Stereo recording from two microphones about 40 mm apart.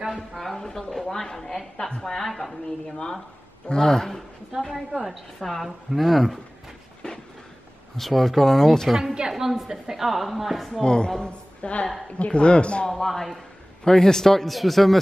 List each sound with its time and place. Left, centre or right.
0.4 s a woman's voice: centre
1.9 s a woman's voice: centre
2.1 s a woman's voice: centre
3.6 s a woman's voice: centre
4.6 s a woman's voice: centre
8.0 s a woman's voice: centre
8.9 s a woman's voice: centre
10.8 s a woman's voice: centre
13.1 s a woman's voice: centre